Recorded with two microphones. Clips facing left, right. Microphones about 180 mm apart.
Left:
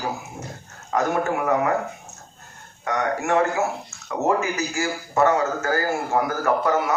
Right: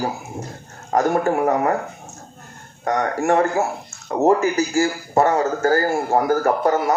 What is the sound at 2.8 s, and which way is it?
A man's voice, 35° right (ahead or behind).